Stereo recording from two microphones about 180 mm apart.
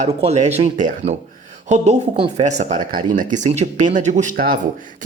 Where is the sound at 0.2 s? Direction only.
35° right (ahead or behind).